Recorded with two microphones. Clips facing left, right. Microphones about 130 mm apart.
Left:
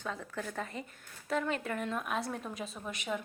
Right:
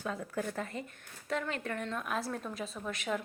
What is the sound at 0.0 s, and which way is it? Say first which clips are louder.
Speech: right 3 dB; 10° right (ahead or behind).